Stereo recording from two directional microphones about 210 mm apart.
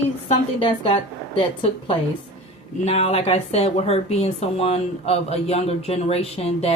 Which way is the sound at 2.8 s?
30° left (ahead or behind).